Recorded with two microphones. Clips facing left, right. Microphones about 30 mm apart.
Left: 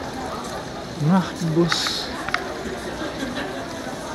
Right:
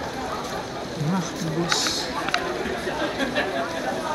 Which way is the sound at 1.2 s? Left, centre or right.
Left.